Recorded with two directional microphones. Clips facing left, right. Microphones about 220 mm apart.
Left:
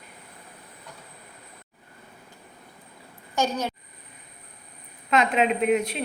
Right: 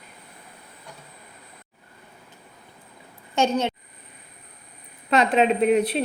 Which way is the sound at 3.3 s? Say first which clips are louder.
Right 4 dB; 25° right (ahead or behind).